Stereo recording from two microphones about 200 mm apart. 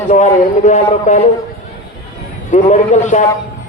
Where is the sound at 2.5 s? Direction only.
35° left (ahead or behind).